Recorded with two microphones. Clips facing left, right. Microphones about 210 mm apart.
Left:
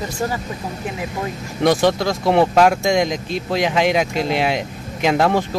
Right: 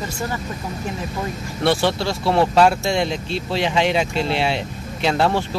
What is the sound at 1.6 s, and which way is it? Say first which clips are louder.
Speech: left 3 dB; 15° left (ahead or behind).